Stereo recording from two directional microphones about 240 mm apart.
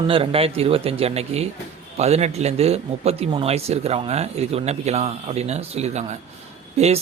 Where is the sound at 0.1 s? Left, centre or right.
Right.